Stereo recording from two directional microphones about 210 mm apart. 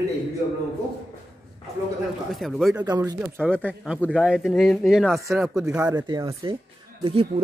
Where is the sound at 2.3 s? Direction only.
Centre (ahead or behind).